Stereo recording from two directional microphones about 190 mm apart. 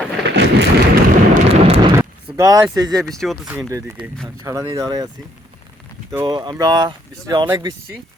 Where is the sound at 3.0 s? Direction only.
Centre (ahead or behind).